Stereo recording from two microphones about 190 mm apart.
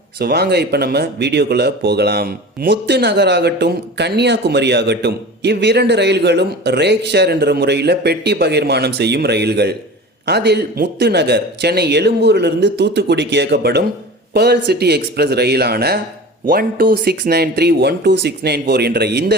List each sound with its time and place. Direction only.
0.2 s speech: 55° right (ahead or behind)